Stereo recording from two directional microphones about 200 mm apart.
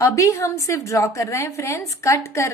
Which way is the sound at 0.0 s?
15° left (ahead or behind).